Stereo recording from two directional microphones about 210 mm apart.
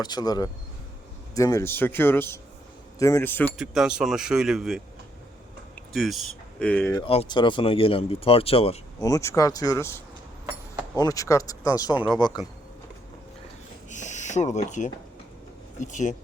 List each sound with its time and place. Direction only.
0.0 s speech: 20° left (ahead or behind)
3.6 s speech: 5° right (ahead or behind)
5.9 s speech: centre (ahead or behind)
7.0 s speech: 25° left (ahead or behind)
9.0 s speech: 15° left (ahead or behind)
13.9 s a sound: 35° left (ahead or behind)
15.8 s speech: 35° left (ahead or behind)